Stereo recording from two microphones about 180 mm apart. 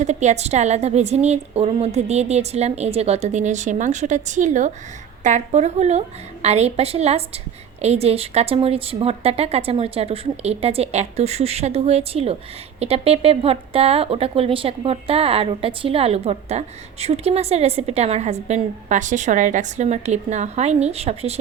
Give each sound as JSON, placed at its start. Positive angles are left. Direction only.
{"t": 0.0, "sound": "a woman's voice", "side_deg": -40}